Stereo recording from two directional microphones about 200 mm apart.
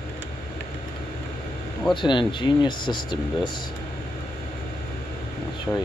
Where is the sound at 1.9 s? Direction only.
25° left (ahead or behind).